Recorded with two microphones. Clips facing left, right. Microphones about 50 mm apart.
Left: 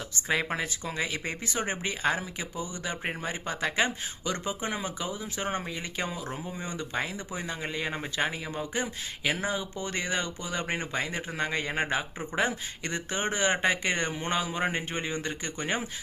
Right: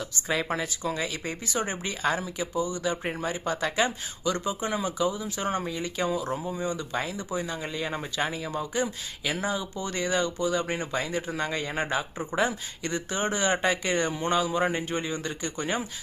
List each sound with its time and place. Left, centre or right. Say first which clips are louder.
0.3 s speech: even; left